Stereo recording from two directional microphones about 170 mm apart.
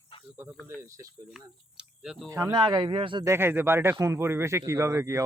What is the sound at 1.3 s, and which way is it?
Speech, 5° right (ahead or behind).